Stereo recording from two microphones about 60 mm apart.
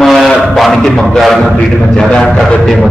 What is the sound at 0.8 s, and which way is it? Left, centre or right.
Speech, centre.